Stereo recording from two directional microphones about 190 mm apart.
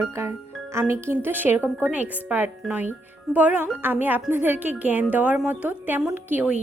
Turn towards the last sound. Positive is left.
turn(degrees=-10)  # may be behind; listen again after turning